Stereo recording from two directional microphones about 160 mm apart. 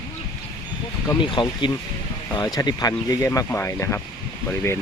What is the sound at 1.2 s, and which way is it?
Speech, 30° left (ahead or behind).